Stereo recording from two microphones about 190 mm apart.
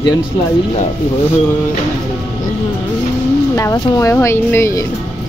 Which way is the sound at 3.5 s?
15° left (ahead or behind).